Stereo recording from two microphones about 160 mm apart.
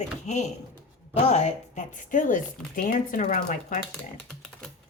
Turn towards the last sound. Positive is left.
turn(degrees=55)  # may be behind; listen again after turning